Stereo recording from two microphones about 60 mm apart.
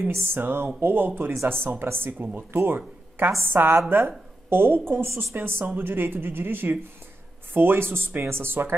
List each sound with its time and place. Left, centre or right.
0.1 s speech: right